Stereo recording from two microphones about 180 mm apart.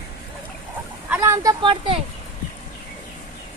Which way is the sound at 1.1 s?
15° right (ahead or behind).